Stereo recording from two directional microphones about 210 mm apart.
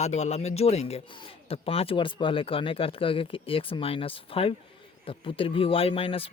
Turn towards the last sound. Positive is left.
turn(degrees=25)  # may be behind; listen again after turning